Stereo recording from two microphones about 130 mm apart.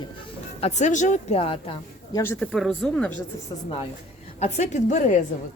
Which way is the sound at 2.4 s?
Centre (ahead or behind).